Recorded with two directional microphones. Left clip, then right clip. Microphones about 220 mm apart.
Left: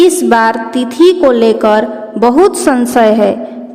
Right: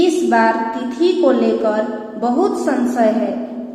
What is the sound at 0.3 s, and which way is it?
A woman's voice, 50° left (ahead or behind).